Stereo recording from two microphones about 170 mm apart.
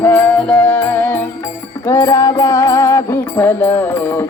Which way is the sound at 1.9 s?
20° left (ahead or behind).